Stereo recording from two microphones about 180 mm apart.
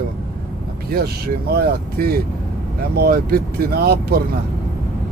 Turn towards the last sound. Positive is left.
turn(degrees=-60)  # may be behind; listen again after turning